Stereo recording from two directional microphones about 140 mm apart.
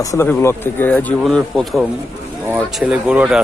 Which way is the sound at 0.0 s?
25° left (ahead or behind).